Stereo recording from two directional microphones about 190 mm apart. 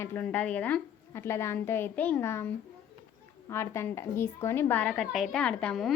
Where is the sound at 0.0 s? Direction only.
10° left (ahead or behind).